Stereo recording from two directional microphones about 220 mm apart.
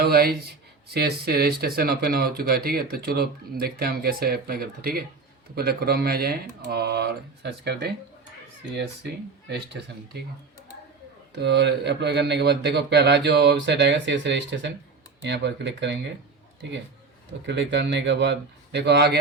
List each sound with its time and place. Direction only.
0.0 s speech: 45° right (ahead or behind)
11.3 s speech: 50° right (ahead or behind)
17.4 s speech: 50° right (ahead or behind)